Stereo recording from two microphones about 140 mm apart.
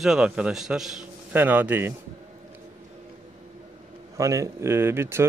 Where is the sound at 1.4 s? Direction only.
15° right (ahead or behind).